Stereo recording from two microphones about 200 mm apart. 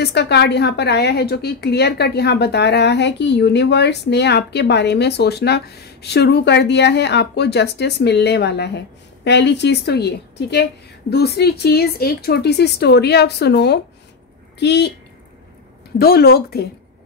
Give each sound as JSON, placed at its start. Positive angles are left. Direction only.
{"t": 0.0, "sound": "a woman's voice", "side_deg": 55}
{"t": 16.0, "sound": "speech", "side_deg": 50}